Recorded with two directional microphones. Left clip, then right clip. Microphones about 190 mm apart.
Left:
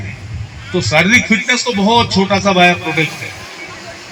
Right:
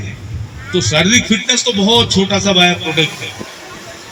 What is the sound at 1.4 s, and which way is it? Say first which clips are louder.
A man's voice: even; 20° left (ahead or behind).